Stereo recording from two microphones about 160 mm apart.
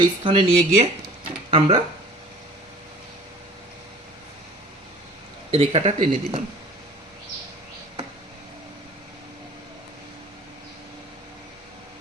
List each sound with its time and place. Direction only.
0.0 s speech: 35° right (ahead or behind)
5.5 s speech: 40° right (ahead or behind)